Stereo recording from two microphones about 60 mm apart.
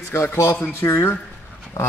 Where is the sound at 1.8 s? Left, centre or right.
Left.